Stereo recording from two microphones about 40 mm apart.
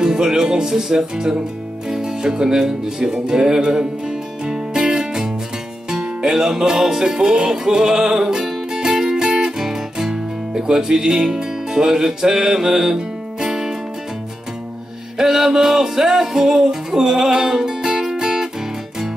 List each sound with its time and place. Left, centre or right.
0.0 s music: centre
15.1 s music: centre